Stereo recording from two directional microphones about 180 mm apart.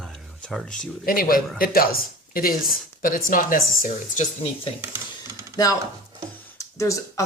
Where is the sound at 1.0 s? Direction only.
55° left (ahead or behind).